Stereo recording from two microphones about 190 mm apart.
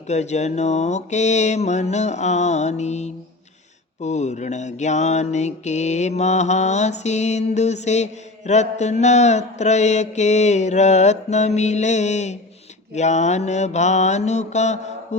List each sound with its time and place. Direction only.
0.1 s mantra: 35° left (ahead or behind)